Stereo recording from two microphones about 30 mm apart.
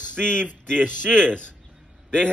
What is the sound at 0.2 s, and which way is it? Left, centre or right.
Speech, left.